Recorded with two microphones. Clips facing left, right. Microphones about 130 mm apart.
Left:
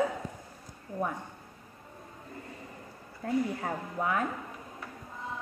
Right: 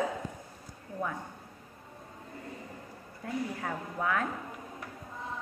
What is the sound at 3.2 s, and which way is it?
Speech, 35° left (ahead or behind).